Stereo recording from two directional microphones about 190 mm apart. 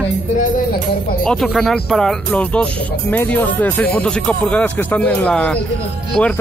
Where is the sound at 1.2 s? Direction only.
5° left (ahead or behind).